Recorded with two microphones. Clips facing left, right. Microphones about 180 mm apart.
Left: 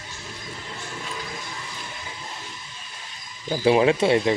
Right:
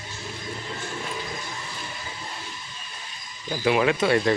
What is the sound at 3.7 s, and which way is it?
Speech, 30° left (ahead or behind).